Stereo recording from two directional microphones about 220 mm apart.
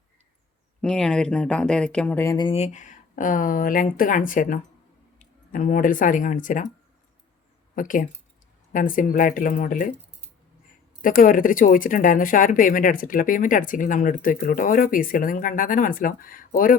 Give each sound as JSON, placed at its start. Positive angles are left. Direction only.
{"t": 0.8, "sound": "speech", "side_deg": 5}
{"t": 7.8, "sound": "speech", "side_deg": 35}
{"t": 11.0, "sound": "speech", "side_deg": 40}